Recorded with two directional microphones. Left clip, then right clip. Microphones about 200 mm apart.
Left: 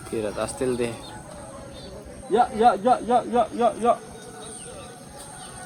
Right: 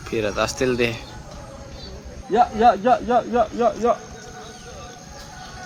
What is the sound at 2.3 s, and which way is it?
Speech, 45° right (ahead or behind).